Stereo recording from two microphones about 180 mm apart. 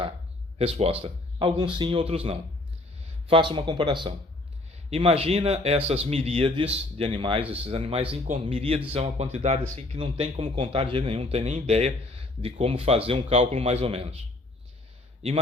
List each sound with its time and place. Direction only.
0.6 s a man's voice: 30° right (ahead or behind)